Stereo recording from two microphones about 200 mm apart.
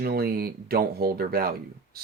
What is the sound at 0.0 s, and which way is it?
Speech, 50° right (ahead or behind).